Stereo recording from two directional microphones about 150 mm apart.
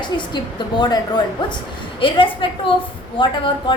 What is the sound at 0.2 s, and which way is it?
A woman's voice, 30° left (ahead or behind).